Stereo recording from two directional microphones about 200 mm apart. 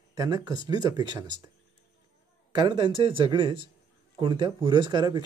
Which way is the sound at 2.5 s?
20° right (ahead or behind).